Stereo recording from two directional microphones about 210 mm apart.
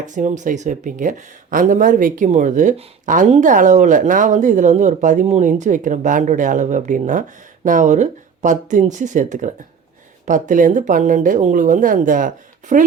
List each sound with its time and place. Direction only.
0.0 s speech: 35° right (ahead or behind)